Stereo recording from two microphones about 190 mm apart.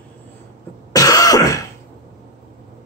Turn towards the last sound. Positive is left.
turn(degrees=20)  # may be behind; listen again after turning